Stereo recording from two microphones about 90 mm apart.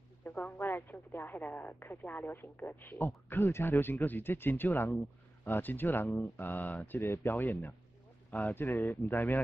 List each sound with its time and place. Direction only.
0.2 s speech: 20° left (ahead or behind)